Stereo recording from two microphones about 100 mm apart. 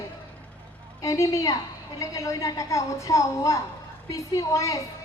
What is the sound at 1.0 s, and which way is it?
A woman's voice, 35° left (ahead or behind).